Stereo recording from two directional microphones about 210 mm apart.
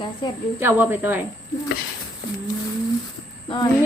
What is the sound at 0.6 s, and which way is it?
Speech, 10° right (ahead or behind).